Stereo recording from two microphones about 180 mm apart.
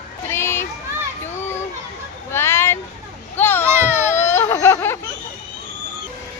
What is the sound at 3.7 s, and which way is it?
Speech, 15° right (ahead or behind).